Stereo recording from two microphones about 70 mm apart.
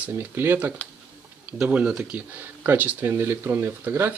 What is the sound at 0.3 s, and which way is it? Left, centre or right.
Speech, right.